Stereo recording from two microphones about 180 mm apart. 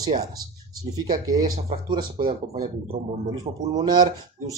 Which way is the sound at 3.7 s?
25° right (ahead or behind).